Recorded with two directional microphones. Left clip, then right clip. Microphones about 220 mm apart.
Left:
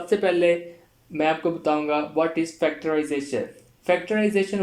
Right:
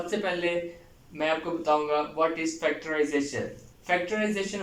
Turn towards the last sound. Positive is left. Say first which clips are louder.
# left 5 dB
turn(degrees=55)  # may be behind; listen again after turning